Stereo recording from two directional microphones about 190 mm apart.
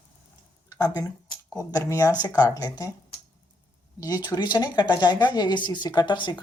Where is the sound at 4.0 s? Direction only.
20° left (ahead or behind).